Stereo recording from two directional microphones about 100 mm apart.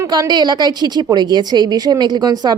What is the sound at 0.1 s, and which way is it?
A woman's voice, 45° right (ahead or behind).